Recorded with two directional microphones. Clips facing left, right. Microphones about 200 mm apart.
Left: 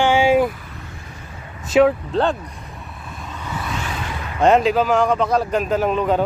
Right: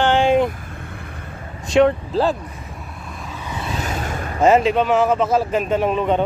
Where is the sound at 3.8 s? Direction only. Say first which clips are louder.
Right 3 dB; 45° right (ahead or behind).